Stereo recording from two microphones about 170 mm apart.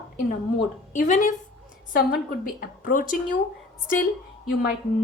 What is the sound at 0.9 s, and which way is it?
Speech, 50° left (ahead or behind).